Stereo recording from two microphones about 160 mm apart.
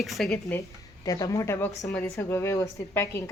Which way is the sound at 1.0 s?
20° left (ahead or behind).